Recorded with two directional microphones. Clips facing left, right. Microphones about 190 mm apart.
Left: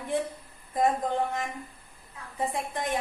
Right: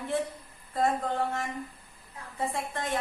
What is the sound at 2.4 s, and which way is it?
Speech, 15° left (ahead or behind).